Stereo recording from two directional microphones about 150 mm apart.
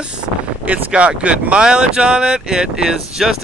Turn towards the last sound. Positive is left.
turn(degrees=-5)  # may be behind; listen again after turning